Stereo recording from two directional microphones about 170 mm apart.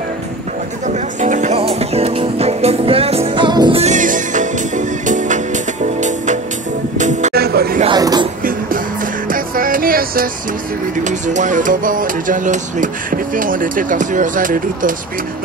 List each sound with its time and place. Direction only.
0.8 s music: 45° right (ahead or behind); by 3.8 s 25° right (ahead or behind)
3.8 s music: 50° right (ahead or behind)
7.3 s music: 65° right (ahead or behind)
7.8 s a sound: 25° right (ahead or behind)
9.3 s music: 55° right (ahead or behind)
11.1 s music: 45° right (ahead or behind)